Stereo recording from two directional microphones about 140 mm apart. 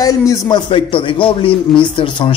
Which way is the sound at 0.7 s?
35° left (ahead or behind).